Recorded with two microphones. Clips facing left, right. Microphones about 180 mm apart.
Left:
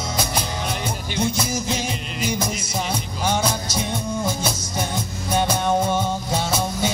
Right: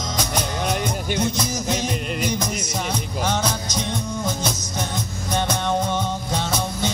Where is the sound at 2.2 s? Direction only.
10° left (ahead or behind).